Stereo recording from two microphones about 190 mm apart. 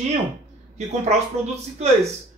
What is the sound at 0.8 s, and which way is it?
Speech, 35° right (ahead or behind).